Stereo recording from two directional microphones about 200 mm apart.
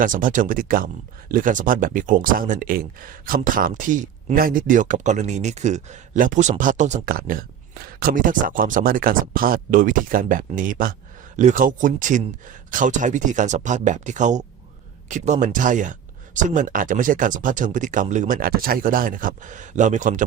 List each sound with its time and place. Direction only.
0.0 s speech: 40° right (ahead or behind)